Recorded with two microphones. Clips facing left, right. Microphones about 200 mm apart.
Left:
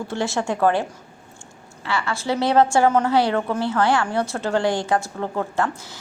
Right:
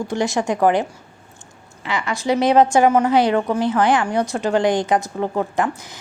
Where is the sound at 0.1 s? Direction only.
15° right (ahead or behind).